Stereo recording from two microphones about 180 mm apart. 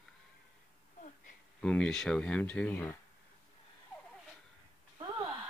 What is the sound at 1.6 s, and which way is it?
Speech, 5° left (ahead or behind).